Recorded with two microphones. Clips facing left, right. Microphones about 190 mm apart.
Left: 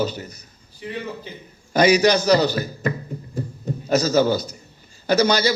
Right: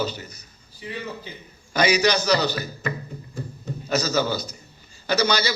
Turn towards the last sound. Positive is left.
turn(degrees=50)  # may be behind; listen again after turning